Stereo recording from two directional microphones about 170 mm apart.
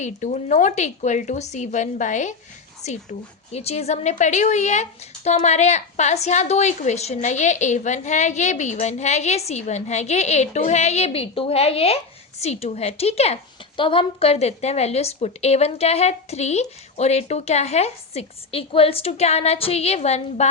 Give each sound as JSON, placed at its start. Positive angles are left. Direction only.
{"t": 0.0, "sound": "a woman's voice", "side_deg": 45}